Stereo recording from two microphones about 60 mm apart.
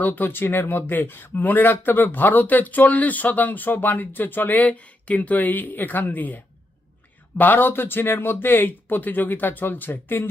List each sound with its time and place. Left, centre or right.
0.0 s speech: left